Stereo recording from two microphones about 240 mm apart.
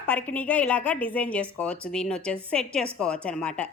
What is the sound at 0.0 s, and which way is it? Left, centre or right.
A woman's voice, centre.